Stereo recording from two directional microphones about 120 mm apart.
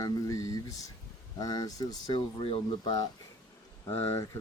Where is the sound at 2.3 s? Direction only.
50° left (ahead or behind).